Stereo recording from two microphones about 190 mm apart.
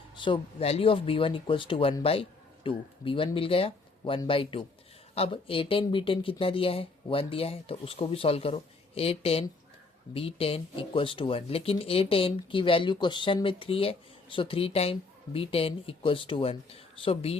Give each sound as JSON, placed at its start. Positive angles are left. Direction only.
{"t": 0.2, "sound": "speech", "side_deg": 30}